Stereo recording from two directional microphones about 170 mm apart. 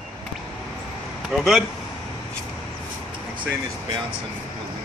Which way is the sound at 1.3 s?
Centre (ahead or behind).